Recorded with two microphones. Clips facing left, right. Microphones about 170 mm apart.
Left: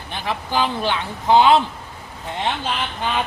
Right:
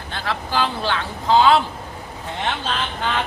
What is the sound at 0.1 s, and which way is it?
A man's voice, 15° left (ahead or behind).